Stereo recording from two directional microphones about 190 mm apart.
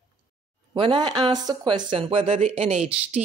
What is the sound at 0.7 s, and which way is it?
Speech, 25° right (ahead or behind).